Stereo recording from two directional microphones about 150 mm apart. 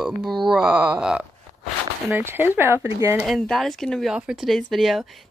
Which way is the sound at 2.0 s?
15° right (ahead or behind).